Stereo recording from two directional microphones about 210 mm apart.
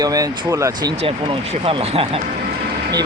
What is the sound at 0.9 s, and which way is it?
Speech, 30° right (ahead or behind).